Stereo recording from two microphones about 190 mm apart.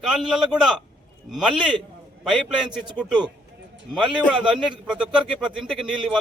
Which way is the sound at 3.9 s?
Centre (ahead or behind).